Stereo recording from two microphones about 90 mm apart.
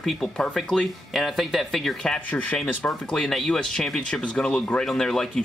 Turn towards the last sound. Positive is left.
turn(degrees=5)  # may be behind; listen again after turning